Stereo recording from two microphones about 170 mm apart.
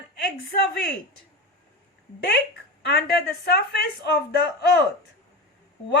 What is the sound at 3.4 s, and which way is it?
Speech, 70° left (ahead or behind).